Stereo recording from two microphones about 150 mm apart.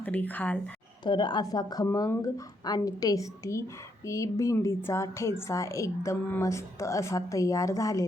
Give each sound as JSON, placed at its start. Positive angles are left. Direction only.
{"t": 0.0, "sound": "speech", "side_deg": 10}
{"t": 1.0, "sound": "a woman's voice", "side_deg": 30}